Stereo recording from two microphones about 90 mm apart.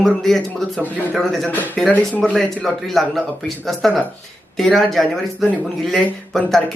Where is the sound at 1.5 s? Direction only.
20° left (ahead or behind).